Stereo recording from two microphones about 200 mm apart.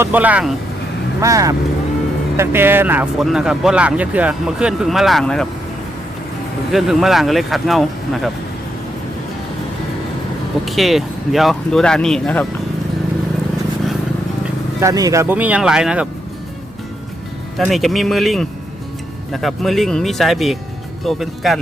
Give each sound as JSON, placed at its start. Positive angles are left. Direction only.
{"t": 0.0, "sound": "speech", "side_deg": -10}
{"t": 6.7, "sound": "speech", "side_deg": 0}
{"t": 10.7, "sound": "speech", "side_deg": 0}
{"t": 14.8, "sound": "speech", "side_deg": -15}
{"t": 17.7, "sound": "speech", "side_deg": 0}